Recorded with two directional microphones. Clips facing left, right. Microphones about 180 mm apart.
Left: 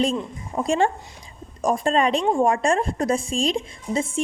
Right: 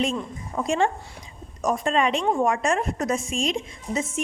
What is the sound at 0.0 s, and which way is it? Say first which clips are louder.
A woman's voice: left 3 dB; 35° left (ahead or behind).